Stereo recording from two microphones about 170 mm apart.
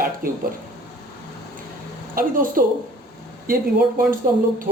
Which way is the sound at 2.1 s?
55° right (ahead or behind).